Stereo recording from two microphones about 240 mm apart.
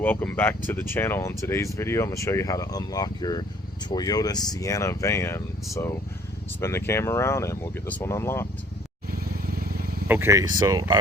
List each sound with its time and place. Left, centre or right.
0.0 s speech: centre
9.5 s wild animals: right
10.1 s speech: centre